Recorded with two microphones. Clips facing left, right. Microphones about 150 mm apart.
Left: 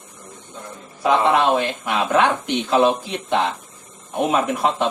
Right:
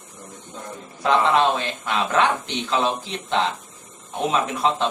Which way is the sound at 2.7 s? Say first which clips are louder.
Left 6 dB; 55° left (ahead or behind).